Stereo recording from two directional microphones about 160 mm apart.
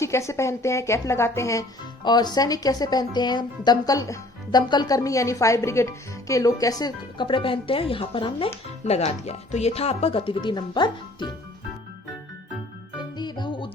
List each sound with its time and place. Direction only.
0.0 s a woman's voice: 20° left (ahead or behind)
13.1 s music: 25° left (ahead or behind)